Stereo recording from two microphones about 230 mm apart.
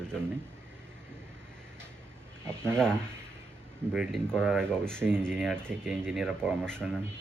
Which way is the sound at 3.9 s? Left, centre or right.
Centre.